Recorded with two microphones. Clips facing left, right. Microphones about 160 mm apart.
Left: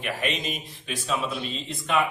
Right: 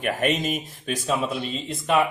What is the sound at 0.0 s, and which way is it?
Speech, 50° right (ahead or behind).